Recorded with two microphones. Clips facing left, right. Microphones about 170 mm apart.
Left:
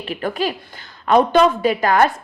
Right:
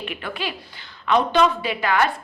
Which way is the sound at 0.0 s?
40° left (ahead or behind).